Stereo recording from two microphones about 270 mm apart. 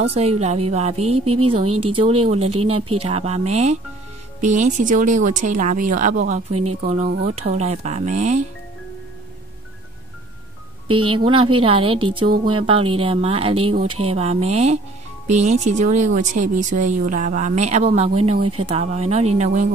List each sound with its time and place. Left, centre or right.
0.0 s speech: right
7.4 s speech: right
10.9 s speech: centre
18.4 s speech: right
18.7 s speech: right